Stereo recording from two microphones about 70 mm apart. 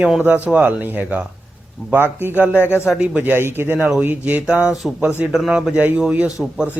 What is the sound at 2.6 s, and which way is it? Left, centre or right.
Speech, left.